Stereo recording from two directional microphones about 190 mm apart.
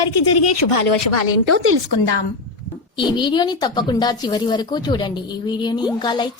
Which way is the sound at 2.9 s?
25° left (ahead or behind).